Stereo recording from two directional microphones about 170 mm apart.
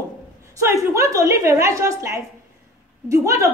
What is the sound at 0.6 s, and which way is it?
A woman's voice, 15° right (ahead or behind).